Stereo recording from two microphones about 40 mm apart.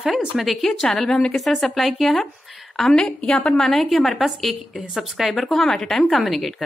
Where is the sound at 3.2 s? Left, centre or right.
Centre.